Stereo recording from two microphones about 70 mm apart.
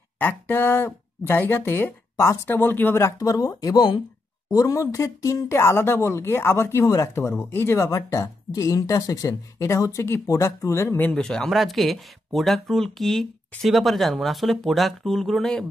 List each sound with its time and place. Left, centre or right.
0.2 s speech: left
3.2 s speech: left
4.5 s speech: left
5.5 s speech: left
7.3 s speech: left
7.8 s speech: left
10.2 s speech: left
11.1 s speech: centre